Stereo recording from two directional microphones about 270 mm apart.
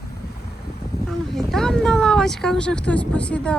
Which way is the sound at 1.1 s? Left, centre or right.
Centre.